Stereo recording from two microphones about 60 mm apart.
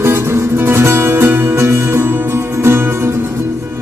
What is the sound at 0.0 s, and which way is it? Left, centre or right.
Music, right.